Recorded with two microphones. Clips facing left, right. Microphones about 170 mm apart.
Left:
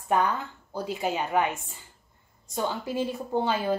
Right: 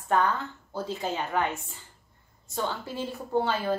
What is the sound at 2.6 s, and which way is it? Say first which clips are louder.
A woman's voice: left 3 dB; 15° left (ahead or behind).